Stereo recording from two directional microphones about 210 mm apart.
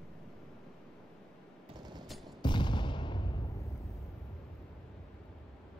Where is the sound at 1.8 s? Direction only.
20° right (ahead or behind).